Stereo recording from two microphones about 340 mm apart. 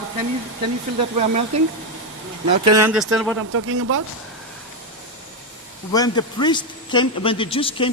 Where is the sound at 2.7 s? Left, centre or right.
Centre.